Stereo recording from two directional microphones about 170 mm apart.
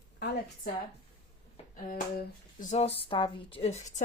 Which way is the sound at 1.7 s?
55° left (ahead or behind).